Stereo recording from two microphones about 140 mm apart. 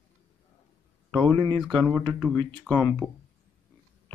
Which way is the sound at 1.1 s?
5° left (ahead or behind).